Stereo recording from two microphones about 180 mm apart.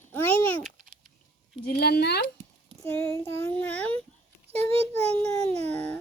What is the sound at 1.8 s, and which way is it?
Speech, 60° left (ahead or behind).